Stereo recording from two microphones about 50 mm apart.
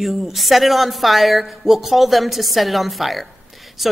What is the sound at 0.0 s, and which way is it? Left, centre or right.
Speech, centre.